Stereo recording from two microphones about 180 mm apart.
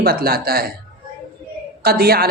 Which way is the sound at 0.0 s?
55° right (ahead or behind).